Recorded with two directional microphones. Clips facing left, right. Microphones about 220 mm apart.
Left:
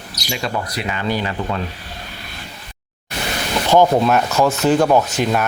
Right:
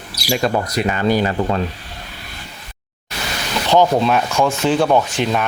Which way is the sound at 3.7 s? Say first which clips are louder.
Left 1 dB; 10° left (ahead or behind).